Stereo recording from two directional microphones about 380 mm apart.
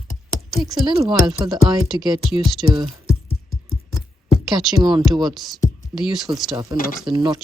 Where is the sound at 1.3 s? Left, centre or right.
Centre.